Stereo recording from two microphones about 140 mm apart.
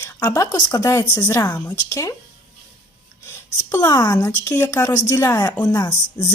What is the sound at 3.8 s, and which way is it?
Speech, 25° left (ahead or behind).